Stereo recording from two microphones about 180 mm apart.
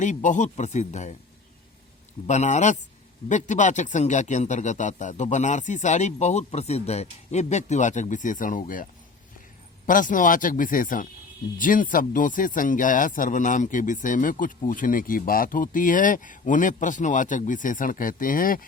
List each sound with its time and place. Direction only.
0.0 s speech: 45° left (ahead or behind)
2.2 s speech: 40° left (ahead or behind)